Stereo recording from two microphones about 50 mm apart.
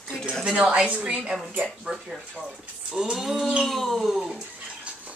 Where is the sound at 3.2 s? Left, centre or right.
Centre.